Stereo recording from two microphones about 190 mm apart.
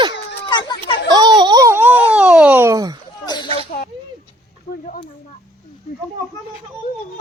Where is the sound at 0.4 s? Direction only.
25° left (ahead or behind).